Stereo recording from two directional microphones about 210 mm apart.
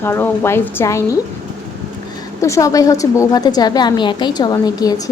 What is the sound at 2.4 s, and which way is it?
A woman's voice, 15° left (ahead or behind).